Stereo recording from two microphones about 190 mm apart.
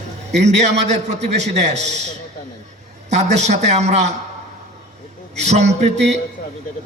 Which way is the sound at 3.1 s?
35° right (ahead or behind).